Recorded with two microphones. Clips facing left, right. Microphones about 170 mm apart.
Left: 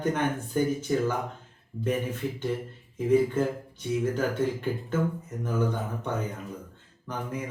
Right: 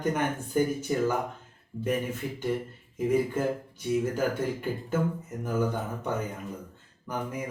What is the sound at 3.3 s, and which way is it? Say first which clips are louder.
Speech: left 1 dB; 10° right (ahead or behind).